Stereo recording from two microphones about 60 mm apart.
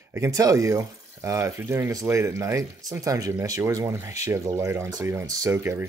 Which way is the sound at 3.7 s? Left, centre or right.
Right.